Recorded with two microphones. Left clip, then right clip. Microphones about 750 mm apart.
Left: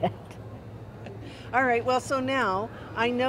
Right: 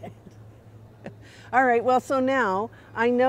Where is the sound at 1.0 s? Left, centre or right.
Right.